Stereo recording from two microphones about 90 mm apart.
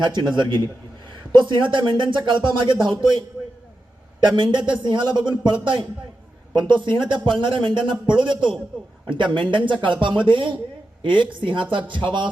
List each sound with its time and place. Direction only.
0.0 s speech: 55° right (ahead or behind)